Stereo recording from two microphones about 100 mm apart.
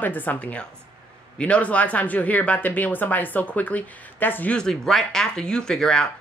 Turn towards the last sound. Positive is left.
turn(degrees=5)  # may be behind; listen again after turning